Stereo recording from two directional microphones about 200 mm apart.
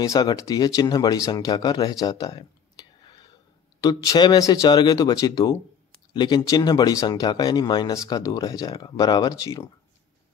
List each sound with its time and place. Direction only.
0.0 s speech: 20° left (ahead or behind)